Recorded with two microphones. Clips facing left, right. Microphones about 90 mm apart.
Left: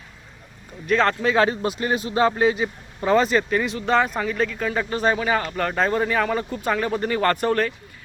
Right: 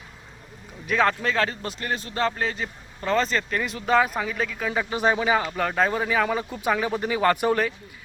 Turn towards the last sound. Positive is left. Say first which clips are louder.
# left 1 dB
turn(degrees=-10)  # may be behind; listen again after turning